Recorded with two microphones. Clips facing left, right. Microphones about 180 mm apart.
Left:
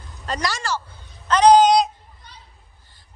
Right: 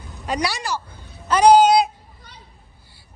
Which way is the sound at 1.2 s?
10° right (ahead or behind).